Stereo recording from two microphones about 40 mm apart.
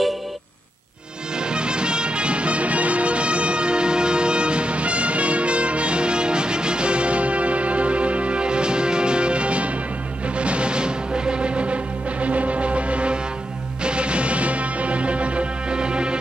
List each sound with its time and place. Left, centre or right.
1.3 s music: right